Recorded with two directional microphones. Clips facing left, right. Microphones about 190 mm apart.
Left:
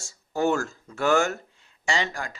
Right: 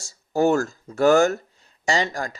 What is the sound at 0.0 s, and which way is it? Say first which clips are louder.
Speech: right 5 dB; 40° right (ahead or behind).